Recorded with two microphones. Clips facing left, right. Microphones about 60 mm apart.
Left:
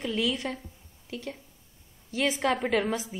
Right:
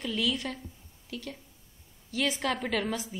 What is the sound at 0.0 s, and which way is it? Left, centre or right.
A woman's voice, centre.